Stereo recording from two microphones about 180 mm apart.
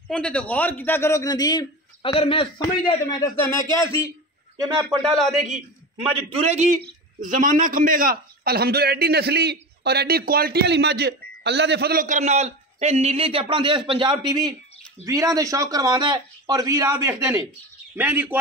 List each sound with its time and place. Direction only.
0.1 s a man's voice: 5° left (ahead or behind)
5.0 s a man's voice: centre (ahead or behind)
6.4 s a man's voice: 40° right (ahead or behind); by 18.4 s 10° right (ahead or behind)